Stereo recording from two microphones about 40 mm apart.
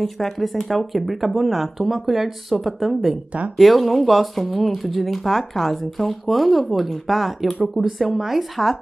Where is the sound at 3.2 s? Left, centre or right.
Right.